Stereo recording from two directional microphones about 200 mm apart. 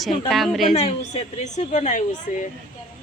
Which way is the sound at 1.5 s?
35° left (ahead or behind).